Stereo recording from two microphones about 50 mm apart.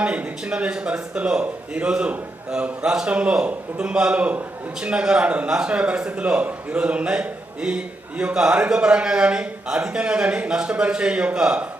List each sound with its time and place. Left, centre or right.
0.0 s a man's voice: right